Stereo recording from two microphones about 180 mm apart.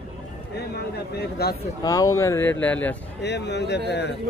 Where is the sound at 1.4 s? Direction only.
60° left (ahead or behind).